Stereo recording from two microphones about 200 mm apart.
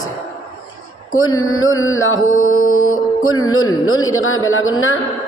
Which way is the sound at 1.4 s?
90° left.